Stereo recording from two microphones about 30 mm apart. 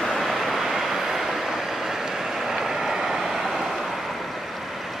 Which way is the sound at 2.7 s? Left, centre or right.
Centre.